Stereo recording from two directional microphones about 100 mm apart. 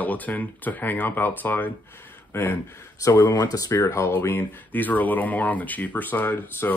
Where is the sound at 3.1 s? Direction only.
45° left (ahead or behind).